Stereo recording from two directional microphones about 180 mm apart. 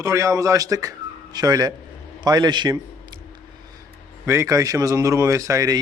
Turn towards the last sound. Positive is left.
turn(degrees=-15)  # may be behind; listen again after turning